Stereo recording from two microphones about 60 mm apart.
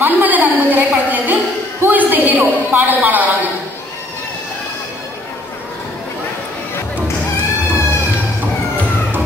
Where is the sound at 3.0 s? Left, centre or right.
Right.